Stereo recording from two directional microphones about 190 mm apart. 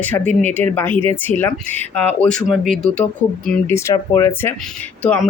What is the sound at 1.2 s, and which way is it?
Speech, 10° left (ahead or behind).